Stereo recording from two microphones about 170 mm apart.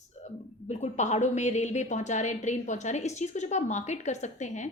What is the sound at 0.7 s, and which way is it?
A woman's voice, 45° left (ahead or behind).